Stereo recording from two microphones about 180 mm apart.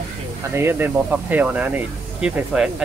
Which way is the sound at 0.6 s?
15° right (ahead or behind).